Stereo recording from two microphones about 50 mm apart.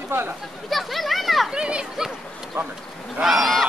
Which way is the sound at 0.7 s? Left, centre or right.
Centre.